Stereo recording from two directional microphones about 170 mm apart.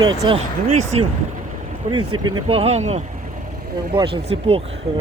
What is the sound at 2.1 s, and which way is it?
Speech, 25° right (ahead or behind).